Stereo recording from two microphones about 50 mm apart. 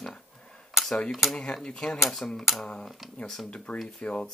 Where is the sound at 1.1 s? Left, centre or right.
Centre.